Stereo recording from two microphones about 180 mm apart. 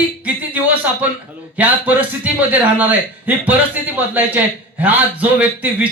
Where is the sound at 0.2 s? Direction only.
10° right (ahead or behind).